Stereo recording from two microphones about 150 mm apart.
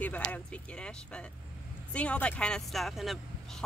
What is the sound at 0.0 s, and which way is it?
Speech, 10° left (ahead or behind).